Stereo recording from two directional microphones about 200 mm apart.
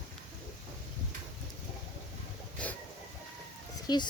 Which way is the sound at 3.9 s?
20° left (ahead or behind).